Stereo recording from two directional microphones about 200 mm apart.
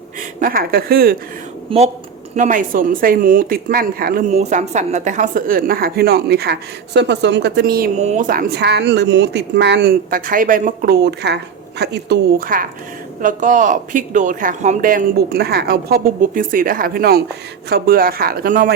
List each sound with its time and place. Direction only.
0.3 s speech: 45° right (ahead or behind)
1.7 s a woman's voice: 25° right (ahead or behind)
2.3 s speech: 40° right (ahead or behind)
4.4 s speech: 35° right (ahead or behind)
7.9 s a woman's voice: 35° right (ahead or behind); by 12.6 s 50° right (ahead or behind)
13.2 s speech: 40° right (ahead or behind)